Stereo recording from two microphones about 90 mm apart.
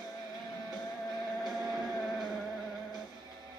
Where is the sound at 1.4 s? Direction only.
5° left (ahead or behind).